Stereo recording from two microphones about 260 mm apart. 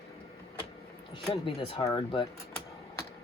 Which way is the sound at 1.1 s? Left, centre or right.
Centre.